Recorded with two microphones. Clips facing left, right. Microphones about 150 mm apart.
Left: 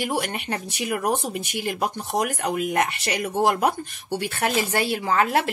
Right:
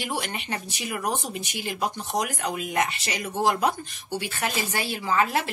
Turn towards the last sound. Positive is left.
turn(degrees=60)  # may be behind; listen again after turning